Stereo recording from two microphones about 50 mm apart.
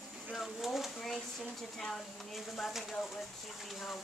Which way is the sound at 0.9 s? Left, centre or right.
Centre.